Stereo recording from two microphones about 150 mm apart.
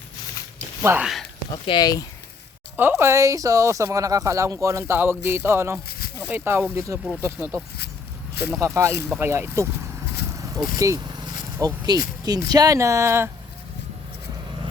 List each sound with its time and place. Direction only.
0.8 s speech: 15° right (ahead or behind)
1.5 s speech: 35° left (ahead or behind)
2.7 s speech: 15° right (ahead or behind)
10.3 s vehicle: 20° right (ahead or behind)
11.5 s speech: 15° right (ahead or behind)